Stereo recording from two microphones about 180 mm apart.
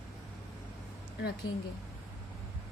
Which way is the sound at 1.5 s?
90° left.